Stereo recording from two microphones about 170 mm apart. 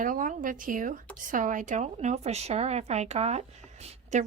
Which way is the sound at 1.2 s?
50° right (ahead or behind).